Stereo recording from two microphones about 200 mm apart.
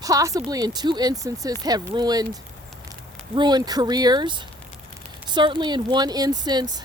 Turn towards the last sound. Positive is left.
turn(degrees=-20)  # may be behind; listen again after turning